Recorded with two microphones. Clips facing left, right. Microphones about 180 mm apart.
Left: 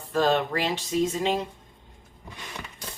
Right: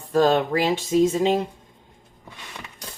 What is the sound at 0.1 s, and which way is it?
Speech, 45° right (ahead or behind).